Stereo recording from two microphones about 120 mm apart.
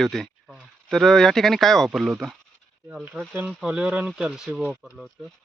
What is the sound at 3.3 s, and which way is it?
Speech, 15° right (ahead or behind).